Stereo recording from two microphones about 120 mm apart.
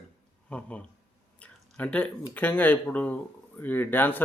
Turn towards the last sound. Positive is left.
turn(degrees=15)  # may be behind; listen again after turning